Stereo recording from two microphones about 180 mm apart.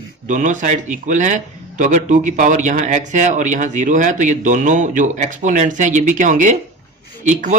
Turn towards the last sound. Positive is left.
turn(degrees=-45)  # may be behind; listen again after turning